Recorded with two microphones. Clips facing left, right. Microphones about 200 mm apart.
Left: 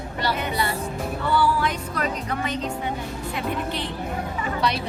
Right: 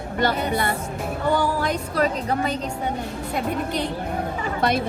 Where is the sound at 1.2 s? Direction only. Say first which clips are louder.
Even; 45° right (ahead or behind).